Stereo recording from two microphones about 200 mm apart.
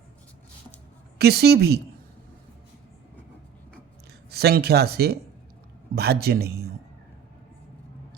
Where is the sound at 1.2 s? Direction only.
55° right (ahead or behind).